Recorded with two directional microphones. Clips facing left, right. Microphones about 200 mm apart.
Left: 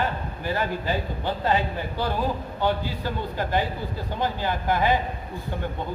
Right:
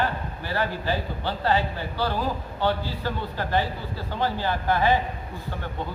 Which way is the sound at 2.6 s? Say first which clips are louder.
Even; 15° left (ahead or behind).